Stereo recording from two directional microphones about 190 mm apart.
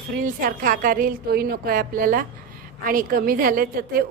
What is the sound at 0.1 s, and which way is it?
A woman's voice, 45° right (ahead or behind).